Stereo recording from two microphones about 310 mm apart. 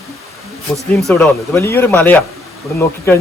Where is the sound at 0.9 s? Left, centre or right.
Centre.